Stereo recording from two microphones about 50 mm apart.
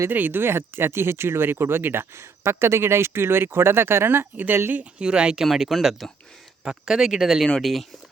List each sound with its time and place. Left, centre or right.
0.1 s speech: right
4.7 s speech: right
5.5 s speech: centre
6.7 s speech: centre